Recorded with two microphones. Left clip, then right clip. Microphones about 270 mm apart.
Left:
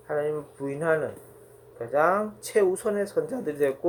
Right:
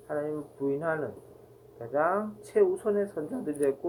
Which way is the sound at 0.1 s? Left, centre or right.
Left.